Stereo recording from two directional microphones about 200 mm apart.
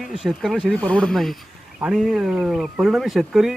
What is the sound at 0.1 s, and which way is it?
Speech, centre (ahead or behind).